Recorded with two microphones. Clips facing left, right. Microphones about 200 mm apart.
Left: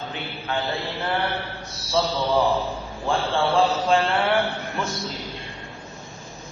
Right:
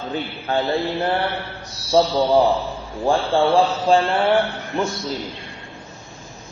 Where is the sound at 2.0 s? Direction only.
40° right (ahead or behind).